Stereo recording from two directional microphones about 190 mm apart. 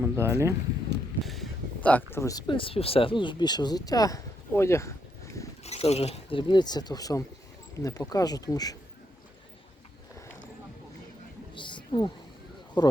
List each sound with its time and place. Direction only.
0.0 s speech: 15° right (ahead or behind)
1.2 s speech: centre (ahead or behind)
5.6 s speech: 35° left (ahead or behind)
11.5 s wild animals: 25° left (ahead or behind)
12.8 s speech: 20° left (ahead or behind)